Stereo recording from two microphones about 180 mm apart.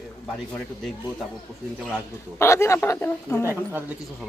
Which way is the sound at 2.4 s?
15° left (ahead or behind).